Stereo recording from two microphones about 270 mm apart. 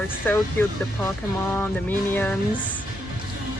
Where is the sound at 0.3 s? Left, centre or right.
Centre.